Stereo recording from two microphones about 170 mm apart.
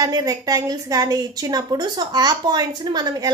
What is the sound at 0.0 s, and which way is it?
A woman's voice, 20° right (ahead or behind).